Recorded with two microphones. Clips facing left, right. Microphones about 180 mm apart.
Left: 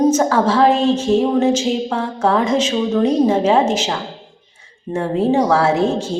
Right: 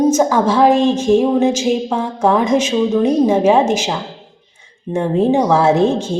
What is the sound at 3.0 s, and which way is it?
A woman's voice, 10° right (ahead or behind).